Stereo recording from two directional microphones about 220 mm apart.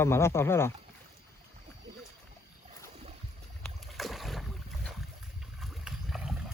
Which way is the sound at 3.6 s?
Centre (ahead or behind).